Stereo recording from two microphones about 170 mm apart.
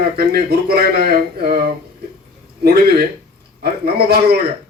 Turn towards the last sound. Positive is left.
turn(degrees=-70)  # may be behind; listen again after turning